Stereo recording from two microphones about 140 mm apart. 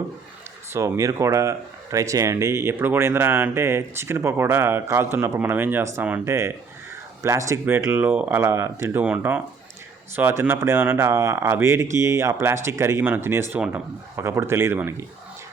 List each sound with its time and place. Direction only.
0.7 s speech: 20° right (ahead or behind)